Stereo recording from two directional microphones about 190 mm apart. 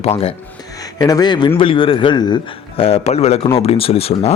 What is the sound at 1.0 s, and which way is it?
A man's voice, 20° left (ahead or behind).